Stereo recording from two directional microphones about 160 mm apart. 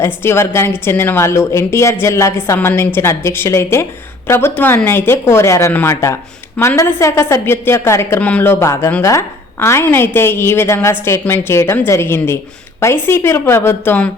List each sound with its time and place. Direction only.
0.0 s a woman's voice: 15° left (ahead or behind)